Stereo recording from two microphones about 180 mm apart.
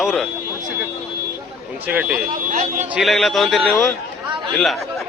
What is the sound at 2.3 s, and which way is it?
Speech, 50° right (ahead or behind).